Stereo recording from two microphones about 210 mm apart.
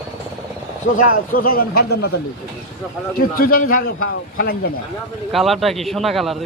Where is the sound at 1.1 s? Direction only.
45° left (ahead or behind).